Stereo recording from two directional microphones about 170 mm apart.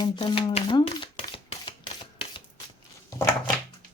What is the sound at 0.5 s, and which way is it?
Shuffling cards, 30° left (ahead or behind).